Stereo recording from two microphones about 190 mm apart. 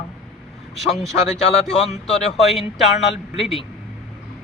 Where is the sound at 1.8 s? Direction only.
35° left (ahead or behind).